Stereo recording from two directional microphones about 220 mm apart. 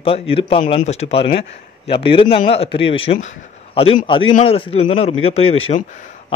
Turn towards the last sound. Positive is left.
turn(degrees=30)  # may be behind; listen again after turning